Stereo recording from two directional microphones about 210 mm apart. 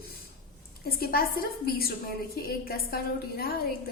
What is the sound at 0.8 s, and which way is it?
A woman's voice, 45° left (ahead or behind).